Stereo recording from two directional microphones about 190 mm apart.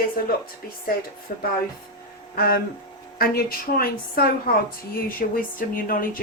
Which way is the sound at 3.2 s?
50° left (ahead or behind).